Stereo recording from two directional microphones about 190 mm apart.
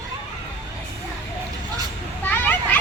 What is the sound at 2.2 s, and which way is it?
Children playing, 10° left (ahead or behind).